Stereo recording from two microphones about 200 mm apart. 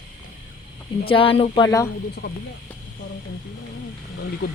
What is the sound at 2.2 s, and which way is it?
Speech, 55° left (ahead or behind).